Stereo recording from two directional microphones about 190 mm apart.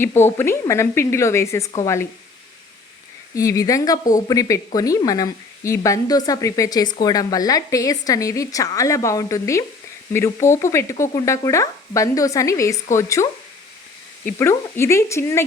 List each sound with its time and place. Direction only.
0.0 s speech: 10° left (ahead or behind)
3.3 s speech: 15° left (ahead or behind)
14.3 s speech: 15° left (ahead or behind)